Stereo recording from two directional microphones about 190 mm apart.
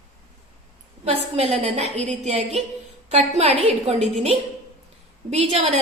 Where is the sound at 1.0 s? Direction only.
35° right (ahead or behind).